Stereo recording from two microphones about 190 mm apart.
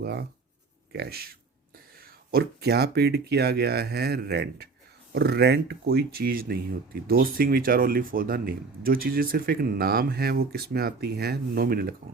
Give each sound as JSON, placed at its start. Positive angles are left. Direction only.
{"t": 0.0, "sound": "speech", "side_deg": -60}